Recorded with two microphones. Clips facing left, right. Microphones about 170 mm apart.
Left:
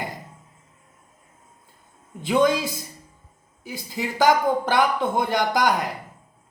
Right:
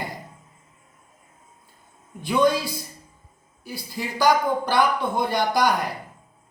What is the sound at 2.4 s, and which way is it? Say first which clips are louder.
Speech: right 1 dB; 20° left (ahead or behind).